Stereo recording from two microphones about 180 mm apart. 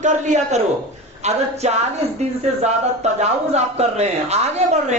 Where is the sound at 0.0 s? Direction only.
40° right (ahead or behind).